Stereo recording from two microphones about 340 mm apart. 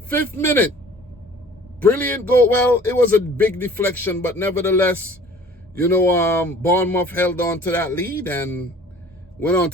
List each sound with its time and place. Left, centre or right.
0.3 s a man's voice: centre
1.8 s a man's voice: centre